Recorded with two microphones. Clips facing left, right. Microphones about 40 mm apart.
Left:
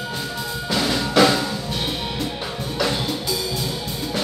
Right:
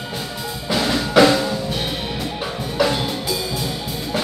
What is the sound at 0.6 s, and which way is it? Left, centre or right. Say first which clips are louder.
Percussion: right 2 dB; centre.